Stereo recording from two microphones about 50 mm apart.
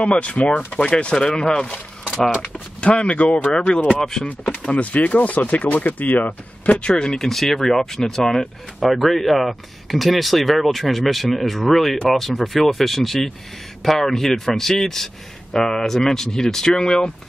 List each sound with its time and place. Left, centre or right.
0.0 s speech: left
2.8 s speech: left
4.6 s speech: left
6.8 s speech: centre
7.2 s speech: centre